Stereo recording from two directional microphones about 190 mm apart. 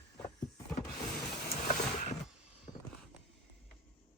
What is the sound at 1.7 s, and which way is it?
Wild animals, 40° left (ahead or behind).